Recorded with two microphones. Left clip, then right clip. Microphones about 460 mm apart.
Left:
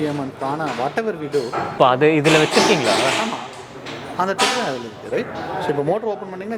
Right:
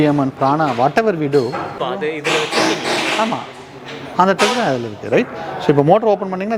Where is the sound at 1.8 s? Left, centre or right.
Left.